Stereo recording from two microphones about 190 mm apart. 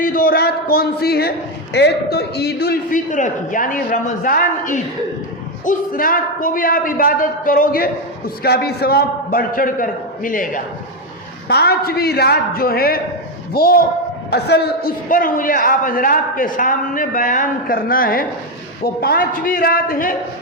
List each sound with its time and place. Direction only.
0.0 s a sound: 50° left (ahead or behind)
1.7 s a man's voice: 60° left (ahead or behind)
11.4 s a man's voice: 55° left (ahead or behind)